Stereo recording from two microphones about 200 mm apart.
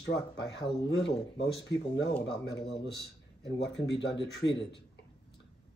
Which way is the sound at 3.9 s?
25° left (ahead or behind).